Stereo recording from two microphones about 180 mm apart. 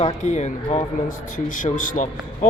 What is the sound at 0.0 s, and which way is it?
A man's voice, 40° left (ahead or behind).